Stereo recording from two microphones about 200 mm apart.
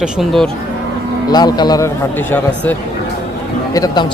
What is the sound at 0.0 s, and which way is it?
Speech, centre (ahead or behind).